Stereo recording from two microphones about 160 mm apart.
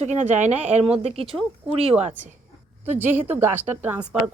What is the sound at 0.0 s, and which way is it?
Speech, 50° right (ahead or behind).